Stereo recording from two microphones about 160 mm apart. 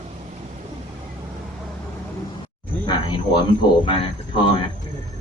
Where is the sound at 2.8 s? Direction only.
25° left (ahead or behind).